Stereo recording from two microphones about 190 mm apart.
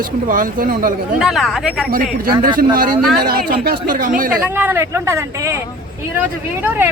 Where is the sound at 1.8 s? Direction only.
45° right (ahead or behind).